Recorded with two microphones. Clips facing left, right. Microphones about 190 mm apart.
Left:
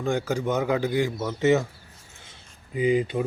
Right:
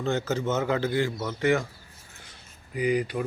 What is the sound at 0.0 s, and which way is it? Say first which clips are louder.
A man's voice: left 1 dB; 10° left (ahead or behind).